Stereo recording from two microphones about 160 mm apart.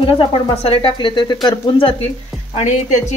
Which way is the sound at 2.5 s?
45° left (ahead or behind).